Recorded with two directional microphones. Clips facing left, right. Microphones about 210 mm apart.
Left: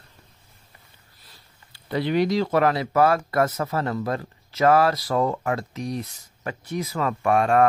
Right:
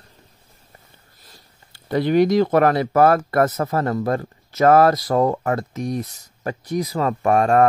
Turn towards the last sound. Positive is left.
turn(degrees=-40)  # may be behind; listen again after turning